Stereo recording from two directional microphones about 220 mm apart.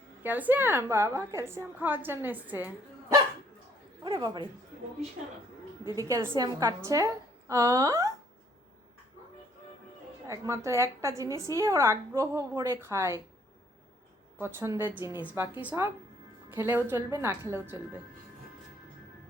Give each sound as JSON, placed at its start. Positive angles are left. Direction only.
{"t": 0.2, "sound": "a woman's voice", "side_deg": -10}
{"t": 4.0, "sound": "a sound", "side_deg": -20}
{"t": 5.8, "sound": "a woman's voice", "side_deg": -15}
{"t": 10.2, "sound": "a woman's voice", "side_deg": -15}
{"t": 14.3, "sound": "a woman's voice", "side_deg": -10}